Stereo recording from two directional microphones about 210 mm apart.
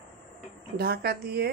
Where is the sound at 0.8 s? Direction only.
45° right (ahead or behind).